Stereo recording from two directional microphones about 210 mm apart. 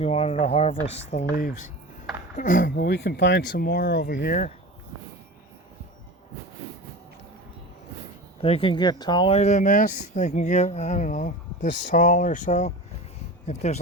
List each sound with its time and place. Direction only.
0.0 s speech: 30° left (ahead or behind)
2.6 s speech: 55° left (ahead or behind)
8.4 s speech: 25° left (ahead or behind)